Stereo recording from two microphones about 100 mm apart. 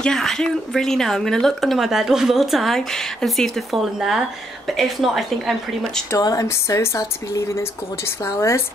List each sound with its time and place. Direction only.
0.0 s a woman's voice: 5° left (ahead or behind)
6.1 s speech: 35° left (ahead or behind)